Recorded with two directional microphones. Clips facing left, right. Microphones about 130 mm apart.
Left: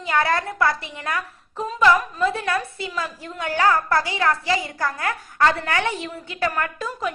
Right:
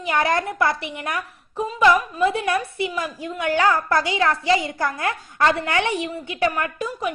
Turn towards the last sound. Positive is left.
turn(degrees=-15)  # may be behind; listen again after turning